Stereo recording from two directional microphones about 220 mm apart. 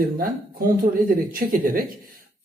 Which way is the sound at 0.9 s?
40° right (ahead or behind).